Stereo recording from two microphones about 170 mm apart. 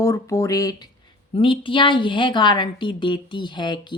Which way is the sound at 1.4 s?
30° left (ahead or behind).